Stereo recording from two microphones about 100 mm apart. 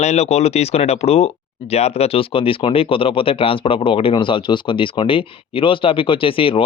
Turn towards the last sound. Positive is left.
turn(degrees=60)  # may be behind; listen again after turning